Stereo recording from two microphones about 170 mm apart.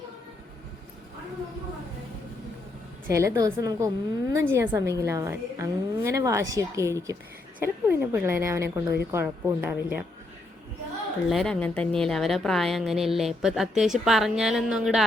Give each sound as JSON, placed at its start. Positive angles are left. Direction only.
{"t": 3.1, "sound": "a woman's voice", "side_deg": -20}
{"t": 11.3, "sound": "a woman's voice", "side_deg": 0}